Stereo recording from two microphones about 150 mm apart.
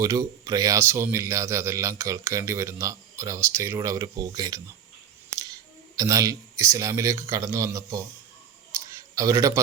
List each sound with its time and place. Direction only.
0.0 s a man's voice: 25° right (ahead or behind)
6.0 s a man's voice: 20° right (ahead or behind)
9.1 s a man's voice: 20° right (ahead or behind)